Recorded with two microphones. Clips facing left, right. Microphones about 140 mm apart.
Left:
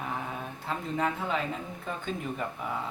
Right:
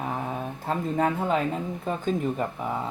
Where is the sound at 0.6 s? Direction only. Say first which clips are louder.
Right 5 dB; 45° right (ahead or behind).